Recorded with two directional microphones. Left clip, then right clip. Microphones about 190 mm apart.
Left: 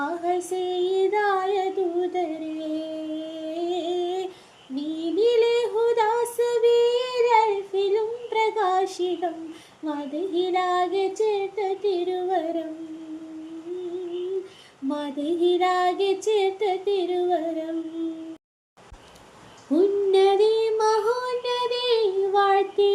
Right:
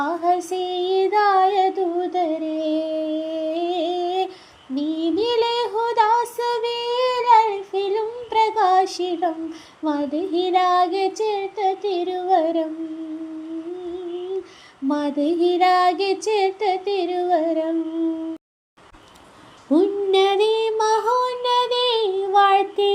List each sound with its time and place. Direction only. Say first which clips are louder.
0.0 s child singing: right 5 dB; 25° right (ahead or behind)
14.8 s child singing: right 6 dB; 20° right (ahead or behind)
19.7 s child singing: right 2 dB; 25° right (ahead or behind)